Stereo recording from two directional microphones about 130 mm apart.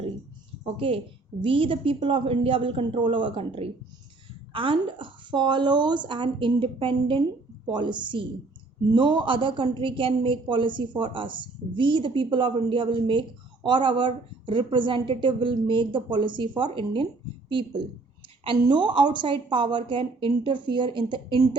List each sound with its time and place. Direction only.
0.8 s a woman's voice: 45° right (ahead or behind)